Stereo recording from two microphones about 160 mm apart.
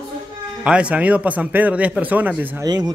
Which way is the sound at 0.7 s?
5° right (ahead or behind).